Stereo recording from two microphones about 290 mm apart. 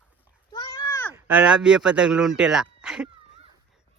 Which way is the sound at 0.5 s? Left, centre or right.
Centre.